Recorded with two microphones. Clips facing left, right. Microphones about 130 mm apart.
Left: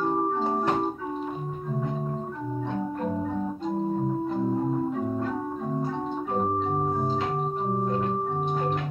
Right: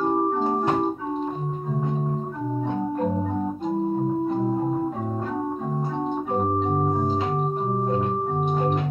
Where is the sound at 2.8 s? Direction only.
25° right (ahead or behind).